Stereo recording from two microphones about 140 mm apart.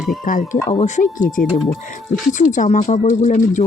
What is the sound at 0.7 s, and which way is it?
Speech, 60° left (ahead or behind).